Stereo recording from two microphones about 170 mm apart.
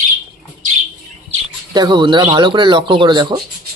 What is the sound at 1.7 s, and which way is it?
Speech, 25° right (ahead or behind).